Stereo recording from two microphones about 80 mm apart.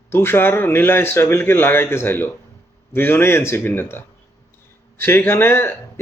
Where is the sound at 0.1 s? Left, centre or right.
Left.